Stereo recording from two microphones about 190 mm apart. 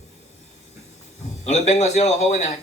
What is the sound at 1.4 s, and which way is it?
Speech, 35° left (ahead or behind).